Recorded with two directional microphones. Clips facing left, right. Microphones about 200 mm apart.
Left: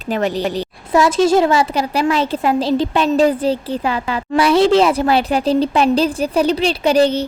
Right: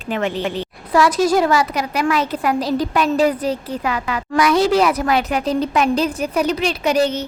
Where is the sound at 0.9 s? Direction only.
25° left (ahead or behind).